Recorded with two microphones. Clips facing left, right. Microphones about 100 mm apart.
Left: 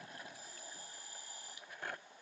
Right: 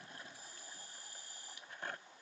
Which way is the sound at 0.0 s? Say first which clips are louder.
Left 2 dB; 20° left (ahead or behind).